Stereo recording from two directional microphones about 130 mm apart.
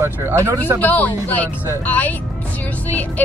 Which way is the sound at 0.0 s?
20° right (ahead or behind).